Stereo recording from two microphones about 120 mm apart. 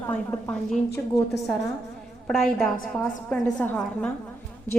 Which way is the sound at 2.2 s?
5° left (ahead or behind).